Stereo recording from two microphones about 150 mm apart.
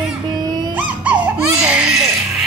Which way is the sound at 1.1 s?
10° right (ahead or behind).